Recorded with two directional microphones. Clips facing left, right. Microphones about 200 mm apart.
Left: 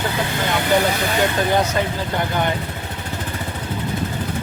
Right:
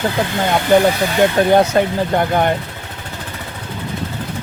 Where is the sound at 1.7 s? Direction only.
50° right (ahead or behind).